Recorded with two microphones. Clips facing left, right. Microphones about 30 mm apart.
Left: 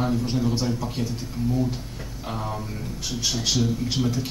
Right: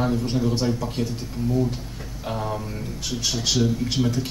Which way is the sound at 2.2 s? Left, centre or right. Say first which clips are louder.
Right 3 dB; centre.